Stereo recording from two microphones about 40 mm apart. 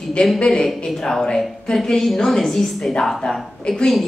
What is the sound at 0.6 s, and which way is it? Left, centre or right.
Speech, centre.